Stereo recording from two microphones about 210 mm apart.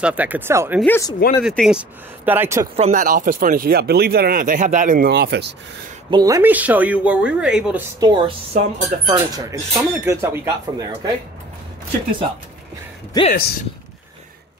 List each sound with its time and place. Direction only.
0.0 s speech: 5° right (ahead or behind)
0.7 s speech: 10° left (ahead or behind)
1.4 s speech: centre (ahead or behind)
2.7 s speech: 35° right (ahead or behind); by 5.5 s 50° right (ahead or behind)
6.0 s speech: 20° right (ahead or behind)
8.0 s speech: 20° right (ahead or behind)
13.3 s speech: 45° left (ahead or behind)